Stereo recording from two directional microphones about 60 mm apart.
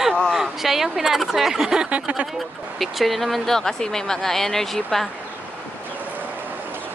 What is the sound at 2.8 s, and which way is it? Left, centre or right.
Speech, centre.